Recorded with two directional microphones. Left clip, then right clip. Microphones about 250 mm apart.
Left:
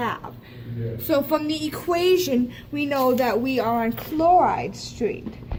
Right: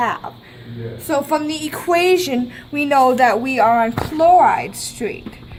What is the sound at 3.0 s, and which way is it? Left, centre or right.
Speech, right.